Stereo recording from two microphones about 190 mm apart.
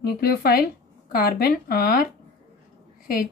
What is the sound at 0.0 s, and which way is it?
Speech, 55° left (ahead or behind).